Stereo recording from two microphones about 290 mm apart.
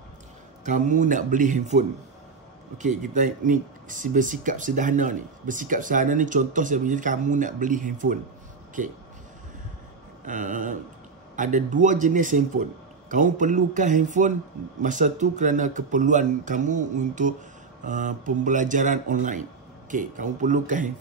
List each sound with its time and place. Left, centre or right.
0.7 s speech: right
10.2 s speech: right